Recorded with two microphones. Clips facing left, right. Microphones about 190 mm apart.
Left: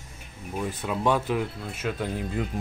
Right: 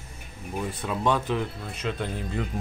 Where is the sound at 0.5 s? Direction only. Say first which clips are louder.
Left 1 dB; 10° left (ahead or behind).